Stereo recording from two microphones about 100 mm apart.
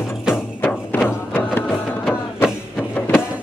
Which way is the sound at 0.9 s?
20° left (ahead or behind).